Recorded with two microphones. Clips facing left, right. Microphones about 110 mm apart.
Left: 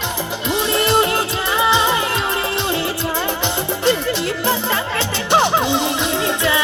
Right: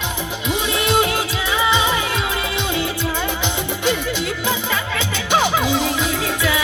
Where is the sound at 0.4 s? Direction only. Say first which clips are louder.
Left 3 dB; centre (ahead or behind).